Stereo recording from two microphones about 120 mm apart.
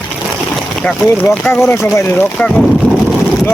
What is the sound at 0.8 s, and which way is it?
Speech, 10° left (ahead or behind).